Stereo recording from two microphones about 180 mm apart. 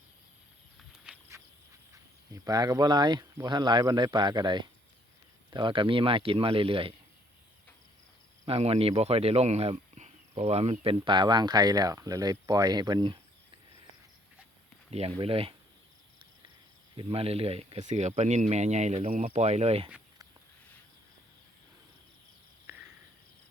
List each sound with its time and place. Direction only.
1.3 s insect: 15° right (ahead or behind)
2.3 s speech: 20° right (ahead or behind)
8.4 s speech: 35° right (ahead or behind)
14.8 s speech: 35° right (ahead or behind)
17.0 s speech: 30° right (ahead or behind)